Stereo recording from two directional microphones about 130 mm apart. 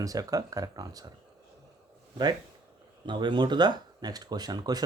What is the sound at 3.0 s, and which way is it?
Speech, 35° right (ahead or behind).